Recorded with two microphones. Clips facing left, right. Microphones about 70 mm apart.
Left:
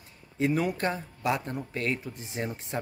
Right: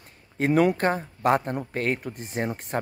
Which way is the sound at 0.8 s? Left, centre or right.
Right.